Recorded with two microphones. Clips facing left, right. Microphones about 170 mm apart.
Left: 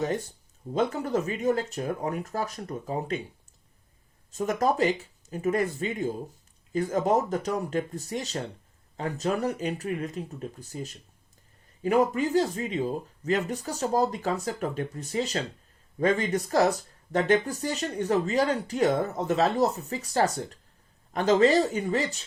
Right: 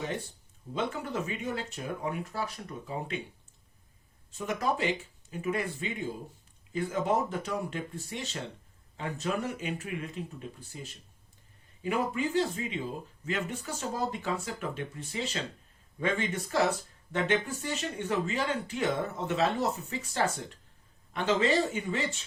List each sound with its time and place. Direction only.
0.0 s speech: 40° left (ahead or behind)
4.3 s speech: 40° left (ahead or behind)